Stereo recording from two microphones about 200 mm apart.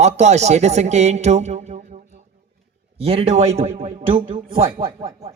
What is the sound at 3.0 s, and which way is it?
A man's voice, 30° right (ahead or behind).